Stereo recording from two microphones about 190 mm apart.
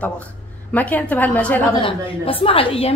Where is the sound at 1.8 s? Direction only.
30° left (ahead or behind).